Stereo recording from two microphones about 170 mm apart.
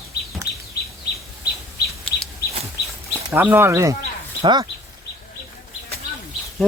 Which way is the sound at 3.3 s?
10° right (ahead or behind).